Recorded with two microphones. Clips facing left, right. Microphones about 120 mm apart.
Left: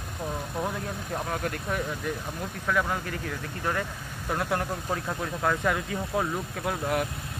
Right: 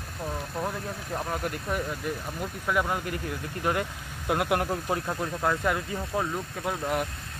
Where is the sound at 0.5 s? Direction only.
Centre (ahead or behind).